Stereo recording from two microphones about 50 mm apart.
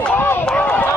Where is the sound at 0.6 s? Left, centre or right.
Left.